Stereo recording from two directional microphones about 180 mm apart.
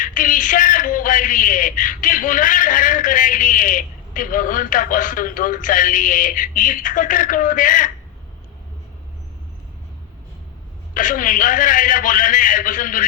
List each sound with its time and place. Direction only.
0.0 s a man's voice: 45° left (ahead or behind)
10.9 s a man's voice: 50° left (ahead or behind)